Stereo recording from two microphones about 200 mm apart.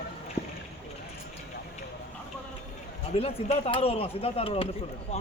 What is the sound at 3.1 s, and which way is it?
Speech, 30° left (ahead or behind).